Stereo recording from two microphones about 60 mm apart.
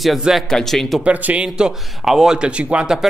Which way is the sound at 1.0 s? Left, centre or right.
Right.